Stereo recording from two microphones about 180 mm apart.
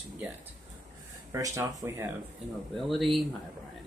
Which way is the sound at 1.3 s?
20° right (ahead or behind).